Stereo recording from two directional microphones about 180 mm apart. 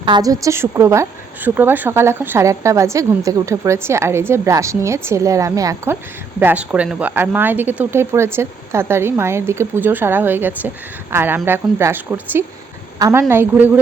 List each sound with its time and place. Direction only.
0.0 s a woman's voice: 25° right (ahead or behind)